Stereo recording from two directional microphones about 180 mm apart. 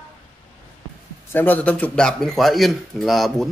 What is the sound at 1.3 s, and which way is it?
Speech, 10° left (ahead or behind).